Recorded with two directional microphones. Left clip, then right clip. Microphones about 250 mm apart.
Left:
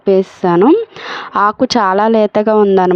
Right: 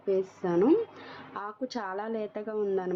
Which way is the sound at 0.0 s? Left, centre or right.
Left.